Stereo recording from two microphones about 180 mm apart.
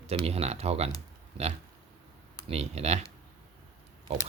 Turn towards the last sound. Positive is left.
turn(degrees=-35)  # may be behind; listen again after turning